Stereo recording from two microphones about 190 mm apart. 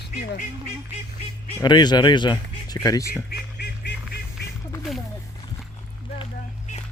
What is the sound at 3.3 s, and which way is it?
Music, 60° left (ahead or behind).